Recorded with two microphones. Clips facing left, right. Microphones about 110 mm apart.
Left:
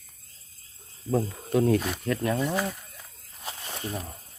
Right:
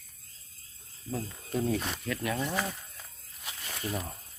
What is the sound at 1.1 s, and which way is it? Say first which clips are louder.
Speech: left 9 dB; 60° left (ahead or behind).